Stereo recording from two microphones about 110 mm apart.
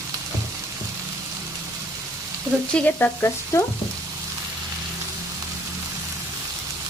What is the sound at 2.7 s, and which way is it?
Frying, 15° left (ahead or behind).